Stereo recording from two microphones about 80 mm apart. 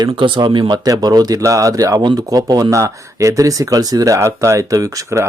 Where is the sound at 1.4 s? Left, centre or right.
Right.